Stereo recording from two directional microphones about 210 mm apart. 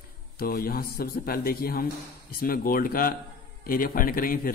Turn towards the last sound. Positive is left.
turn(degrees=40)  # may be behind; listen again after turning